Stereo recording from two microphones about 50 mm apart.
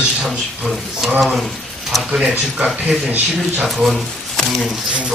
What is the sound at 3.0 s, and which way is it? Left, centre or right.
Speech, right.